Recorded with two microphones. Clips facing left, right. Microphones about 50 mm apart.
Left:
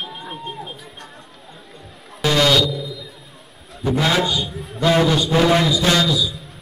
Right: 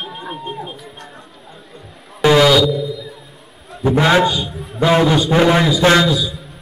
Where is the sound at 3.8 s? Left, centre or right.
Right.